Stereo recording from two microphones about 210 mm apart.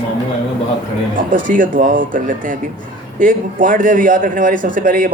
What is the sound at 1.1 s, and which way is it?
A man's voice, 40° right (ahead or behind).